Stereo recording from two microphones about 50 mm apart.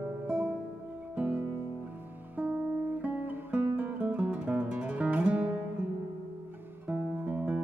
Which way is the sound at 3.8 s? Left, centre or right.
Right.